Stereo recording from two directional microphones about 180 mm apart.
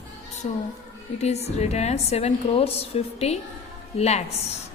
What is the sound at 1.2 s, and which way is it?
A woman's voice, 35° left (ahead or behind).